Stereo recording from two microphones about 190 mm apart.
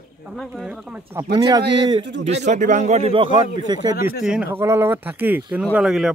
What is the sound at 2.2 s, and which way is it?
Speech, 35° right (ahead or behind).